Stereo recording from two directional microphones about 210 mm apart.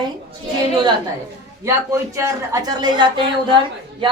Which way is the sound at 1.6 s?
15° right (ahead or behind).